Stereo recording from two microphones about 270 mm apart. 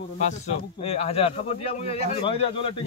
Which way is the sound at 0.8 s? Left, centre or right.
Left.